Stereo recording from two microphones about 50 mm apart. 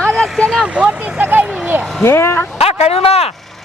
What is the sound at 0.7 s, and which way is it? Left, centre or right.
Vehicle, right.